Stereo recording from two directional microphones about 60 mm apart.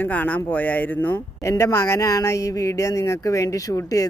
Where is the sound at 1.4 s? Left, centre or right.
Left.